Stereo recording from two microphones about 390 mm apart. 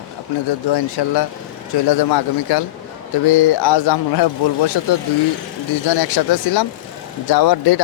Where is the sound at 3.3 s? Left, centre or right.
Left.